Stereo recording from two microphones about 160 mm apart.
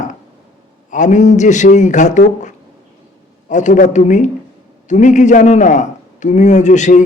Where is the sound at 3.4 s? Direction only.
50° left (ahead or behind).